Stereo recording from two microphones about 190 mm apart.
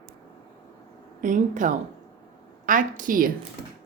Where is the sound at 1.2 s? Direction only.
40° right (ahead or behind).